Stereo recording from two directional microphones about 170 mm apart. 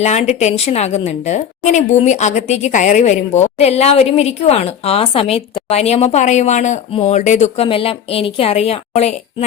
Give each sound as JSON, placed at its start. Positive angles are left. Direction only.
{"t": 0.0, "sound": "a woman's voice", "side_deg": 40}